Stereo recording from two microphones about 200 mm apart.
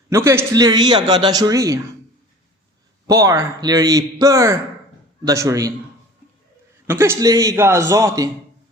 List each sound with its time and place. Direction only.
0.1 s a man's voice: 15° right (ahead or behind)
3.1 s a man's voice: 15° right (ahead or behind)
6.8 s a man's voice: 10° right (ahead or behind)